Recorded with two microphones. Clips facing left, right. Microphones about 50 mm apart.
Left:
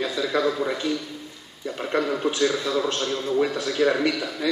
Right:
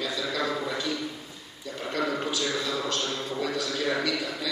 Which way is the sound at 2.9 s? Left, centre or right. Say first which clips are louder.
Left 6 dB; left.